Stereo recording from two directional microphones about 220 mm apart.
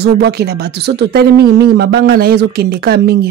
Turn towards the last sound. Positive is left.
turn(degrees=-45)  # may be behind; listen again after turning